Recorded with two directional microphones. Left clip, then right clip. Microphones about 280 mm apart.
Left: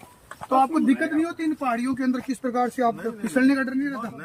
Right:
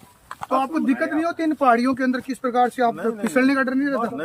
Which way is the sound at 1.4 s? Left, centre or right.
Centre.